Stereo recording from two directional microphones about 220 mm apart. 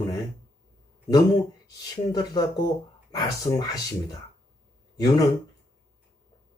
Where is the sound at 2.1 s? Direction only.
20° left (ahead or behind).